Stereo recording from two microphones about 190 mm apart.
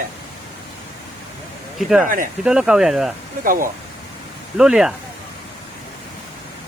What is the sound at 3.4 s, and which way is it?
Speech, 45° right (ahead or behind).